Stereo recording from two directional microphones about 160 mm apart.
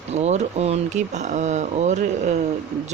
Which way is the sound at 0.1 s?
45° right (ahead or behind).